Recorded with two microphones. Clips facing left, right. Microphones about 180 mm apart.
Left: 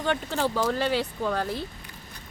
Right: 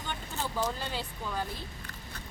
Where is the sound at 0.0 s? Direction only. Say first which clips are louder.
Left 11 dB; 80° left.